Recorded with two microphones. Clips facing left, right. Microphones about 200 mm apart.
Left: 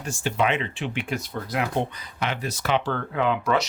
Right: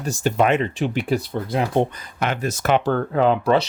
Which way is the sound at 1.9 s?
50° right (ahead or behind).